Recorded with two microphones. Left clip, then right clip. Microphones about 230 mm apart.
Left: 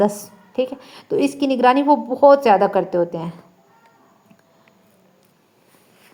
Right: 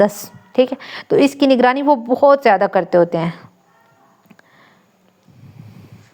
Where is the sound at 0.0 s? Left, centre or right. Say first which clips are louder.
Right 4 dB; right.